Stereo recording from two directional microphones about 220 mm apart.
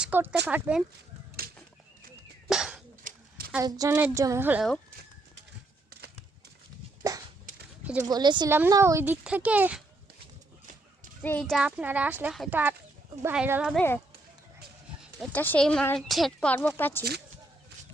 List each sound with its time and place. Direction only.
0.0 s speech: 5° right (ahead or behind)
1.4 s a sound: 40° right (ahead or behind)
2.5 s whip: 5° right (ahead or behind)
3.0 s a sound: 40° right (ahead or behind)
3.5 s speech: 15° right (ahead or behind)
8.0 s speech: 20° right (ahead or behind)
11.2 s speech: 5° left (ahead or behind)
15.2 s speech: 5° left (ahead or behind)